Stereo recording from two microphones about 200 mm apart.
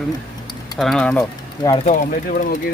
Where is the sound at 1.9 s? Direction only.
40° left (ahead or behind).